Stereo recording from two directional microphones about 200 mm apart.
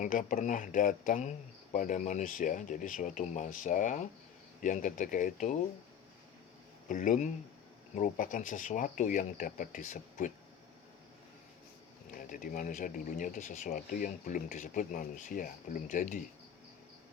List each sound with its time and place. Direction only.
0.0 s speech: 40° left (ahead or behind)
6.8 s speech: 40° left (ahead or behind)
12.3 s speech: 40° left (ahead or behind)